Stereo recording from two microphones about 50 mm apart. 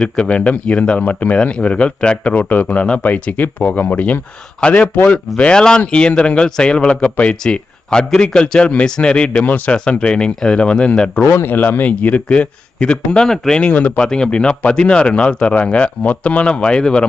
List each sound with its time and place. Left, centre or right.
0.0 s speech: left
1.4 s speech: left
2.3 s speech: left
3.4 s speech: left
4.6 s speech: left
5.5 s speech: centre
9.4 s speech: left
9.9 s speech: left
11.4 s speech: left; by 13.6 s centre
13.6 s speech: left
14.0 s speech: centre